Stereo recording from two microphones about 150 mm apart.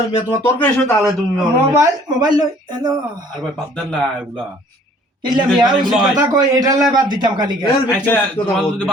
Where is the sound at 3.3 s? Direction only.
Centre (ahead or behind).